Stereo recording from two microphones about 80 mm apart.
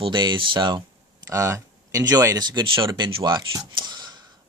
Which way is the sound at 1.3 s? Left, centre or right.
Right.